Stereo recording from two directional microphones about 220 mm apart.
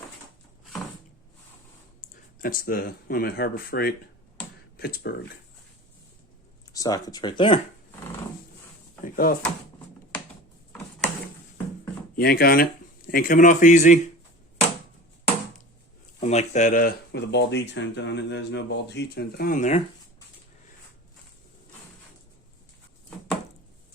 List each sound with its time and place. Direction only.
2.0 s speech: 40° left (ahead or behind)
6.7 s speech: 15° left (ahead or behind)
9.0 s a man's voice: 40° left (ahead or behind)
12.1 s a man's voice: 45° left (ahead or behind)
16.2 s speech: 30° left (ahead or behind)